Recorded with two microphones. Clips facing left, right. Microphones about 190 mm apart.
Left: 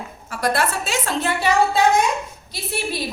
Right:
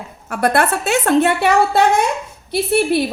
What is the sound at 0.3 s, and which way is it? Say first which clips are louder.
A woman's voice: right 5 dB; 60° right (ahead or behind).